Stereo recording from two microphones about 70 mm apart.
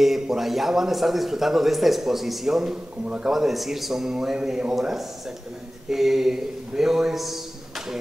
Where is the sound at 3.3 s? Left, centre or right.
Centre.